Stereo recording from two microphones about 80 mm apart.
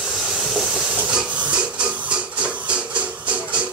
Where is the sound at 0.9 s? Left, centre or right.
Centre.